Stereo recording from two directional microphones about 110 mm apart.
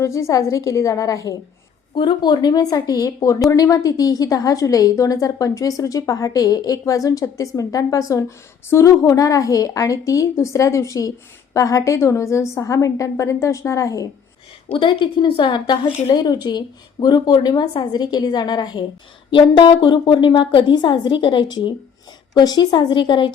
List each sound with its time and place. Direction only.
0.0 s a woman's voice: 30° left (ahead or behind)
2.0 s a woman's voice: 45° left (ahead or behind)
14.7 s a woman's voice: 50° left (ahead or behind)